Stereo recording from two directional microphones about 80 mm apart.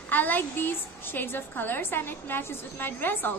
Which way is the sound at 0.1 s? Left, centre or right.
Left.